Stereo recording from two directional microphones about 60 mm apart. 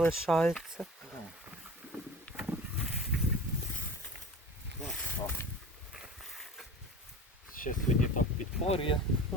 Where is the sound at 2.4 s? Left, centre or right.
Right.